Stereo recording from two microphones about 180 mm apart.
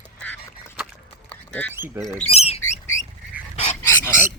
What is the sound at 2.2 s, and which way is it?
Bird, 35° left (ahead or behind).